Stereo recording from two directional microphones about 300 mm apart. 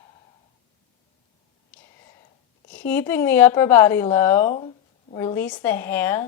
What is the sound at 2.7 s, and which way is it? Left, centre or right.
Speech, centre.